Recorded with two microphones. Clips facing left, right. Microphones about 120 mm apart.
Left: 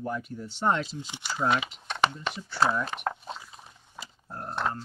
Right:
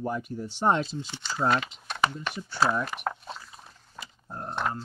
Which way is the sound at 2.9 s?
Centre (ahead or behind).